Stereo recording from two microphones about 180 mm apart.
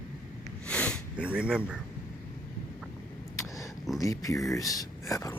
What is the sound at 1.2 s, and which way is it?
Speech, 5° right (ahead or behind).